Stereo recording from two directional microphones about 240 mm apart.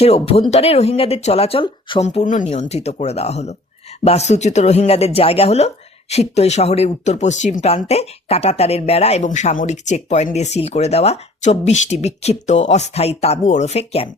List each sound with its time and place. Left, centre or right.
0.0 s speech: left